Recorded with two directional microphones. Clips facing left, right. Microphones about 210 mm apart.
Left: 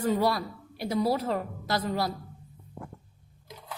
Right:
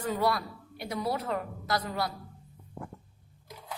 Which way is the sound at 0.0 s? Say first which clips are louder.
Left 3 dB; 25° left (ahead or behind).